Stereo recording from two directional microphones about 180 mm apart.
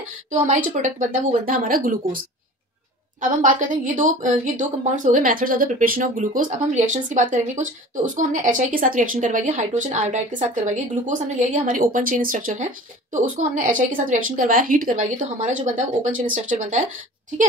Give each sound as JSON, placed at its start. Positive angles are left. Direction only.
{"t": 0.7, "sound": "a woman's voice", "side_deg": -45}
{"t": 3.2, "sound": "a woman's voice", "side_deg": -45}